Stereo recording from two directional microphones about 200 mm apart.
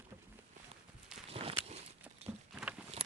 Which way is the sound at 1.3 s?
30° right (ahead or behind).